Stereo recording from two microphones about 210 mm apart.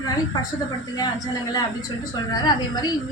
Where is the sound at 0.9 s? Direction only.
20° left (ahead or behind).